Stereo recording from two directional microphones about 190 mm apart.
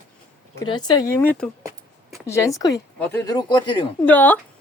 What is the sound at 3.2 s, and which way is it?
Speech, 20° left (ahead or behind).